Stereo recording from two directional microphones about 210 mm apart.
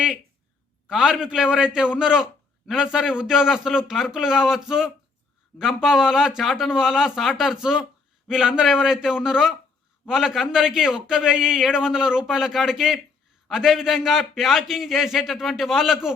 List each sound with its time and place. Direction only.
0.9 s a man's voice: centre (ahead or behind)